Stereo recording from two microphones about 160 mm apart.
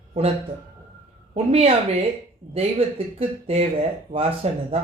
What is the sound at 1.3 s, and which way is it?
Speech, 40° right (ahead or behind).